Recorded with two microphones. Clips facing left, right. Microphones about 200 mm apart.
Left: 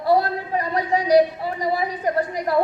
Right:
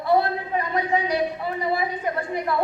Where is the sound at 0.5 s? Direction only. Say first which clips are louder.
Left 2 dB; 35° left (ahead or behind).